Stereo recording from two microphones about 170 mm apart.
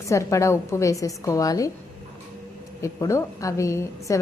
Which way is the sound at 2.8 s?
20° left (ahead or behind).